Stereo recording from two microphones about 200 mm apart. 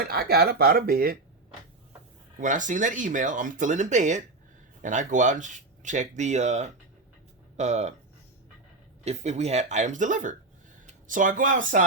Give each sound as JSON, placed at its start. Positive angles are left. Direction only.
{"t": 0.0, "sound": "speech", "side_deg": -50}
{"t": 2.4, "sound": "speech", "side_deg": -40}
{"t": 9.0, "sound": "speech", "side_deg": -35}